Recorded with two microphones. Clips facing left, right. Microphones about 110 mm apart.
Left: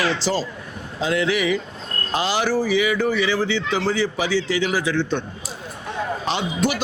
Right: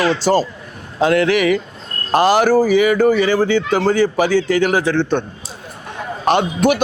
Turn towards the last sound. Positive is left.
turn(degrees=-55)  # may be behind; listen again after turning